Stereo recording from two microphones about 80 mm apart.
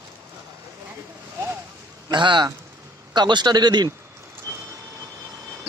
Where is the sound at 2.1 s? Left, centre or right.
Right.